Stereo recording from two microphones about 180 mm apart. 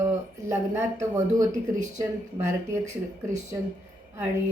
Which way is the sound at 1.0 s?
15° right (ahead or behind).